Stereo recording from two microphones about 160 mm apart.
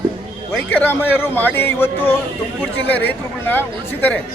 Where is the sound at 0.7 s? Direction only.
10° left (ahead or behind).